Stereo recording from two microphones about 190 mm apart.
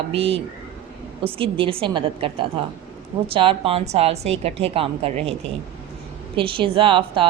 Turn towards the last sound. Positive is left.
turn(degrees=-25)  # may be behind; listen again after turning